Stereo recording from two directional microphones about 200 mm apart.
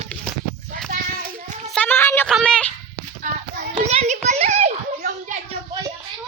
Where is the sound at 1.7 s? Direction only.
5° left (ahead or behind).